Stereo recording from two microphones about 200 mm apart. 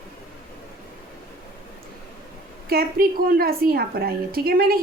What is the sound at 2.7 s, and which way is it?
A woman's voice, 50° right (ahead or behind).